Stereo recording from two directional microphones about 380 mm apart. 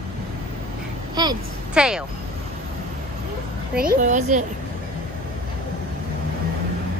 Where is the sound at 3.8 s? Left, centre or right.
Right.